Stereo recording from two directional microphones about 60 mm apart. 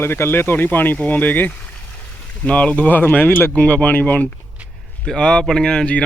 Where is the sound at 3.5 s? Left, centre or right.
Centre.